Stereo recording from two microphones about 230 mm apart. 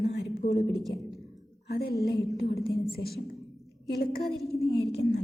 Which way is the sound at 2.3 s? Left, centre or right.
Left.